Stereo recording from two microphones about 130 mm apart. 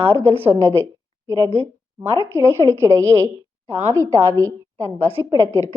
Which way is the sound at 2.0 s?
25° right (ahead or behind).